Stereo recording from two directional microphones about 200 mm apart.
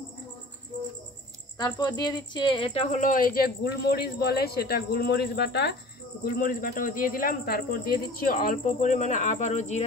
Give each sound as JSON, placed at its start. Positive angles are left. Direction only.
{"t": 1.6, "sound": "a woman's voice", "side_deg": 20}
{"t": 6.2, "sound": "a woman's voice", "side_deg": 45}